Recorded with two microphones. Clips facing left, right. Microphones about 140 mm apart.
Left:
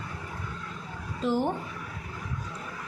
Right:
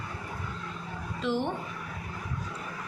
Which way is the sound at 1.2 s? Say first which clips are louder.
Left 3 dB; 45° left (ahead or behind).